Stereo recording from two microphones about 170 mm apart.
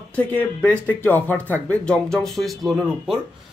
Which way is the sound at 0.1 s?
10° left (ahead or behind).